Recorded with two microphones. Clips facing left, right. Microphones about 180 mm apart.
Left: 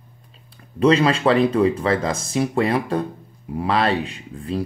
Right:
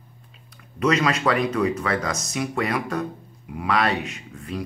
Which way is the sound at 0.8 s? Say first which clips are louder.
Left 5 dB; 30° left (ahead or behind).